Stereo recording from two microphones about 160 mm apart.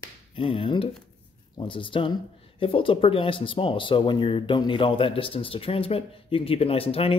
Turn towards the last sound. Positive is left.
turn(degrees=35)  # may be behind; listen again after turning